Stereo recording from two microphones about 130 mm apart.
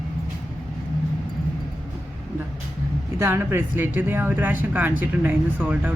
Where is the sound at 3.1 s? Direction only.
20° right (ahead or behind).